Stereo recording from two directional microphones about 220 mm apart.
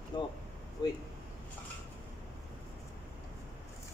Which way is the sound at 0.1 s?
20° left (ahead or behind).